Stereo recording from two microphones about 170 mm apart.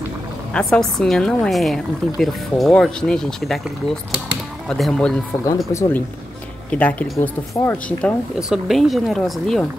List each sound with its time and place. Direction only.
0.5 s a woman's voice: 5° left (ahead or behind)
4.6 s a woman's voice: centre (ahead or behind)
5.7 s speech: 15° left (ahead or behind)
8.4 s a woman's voice: centre (ahead or behind)